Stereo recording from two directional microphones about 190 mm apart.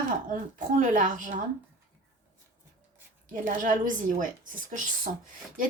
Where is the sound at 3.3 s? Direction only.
45° right (ahead or behind).